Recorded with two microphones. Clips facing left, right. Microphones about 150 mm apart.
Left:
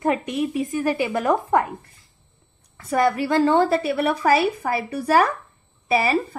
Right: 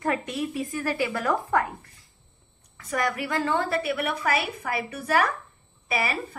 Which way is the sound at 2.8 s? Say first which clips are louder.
Left 8 dB; 30° left (ahead or behind).